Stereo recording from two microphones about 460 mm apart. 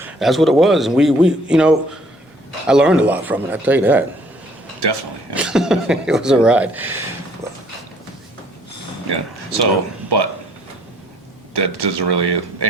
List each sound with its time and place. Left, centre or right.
0.0 s a man's voice: centre
4.8 s speech: right
5.3 s speech: centre
9.0 s speech: right
11.5 s speech: right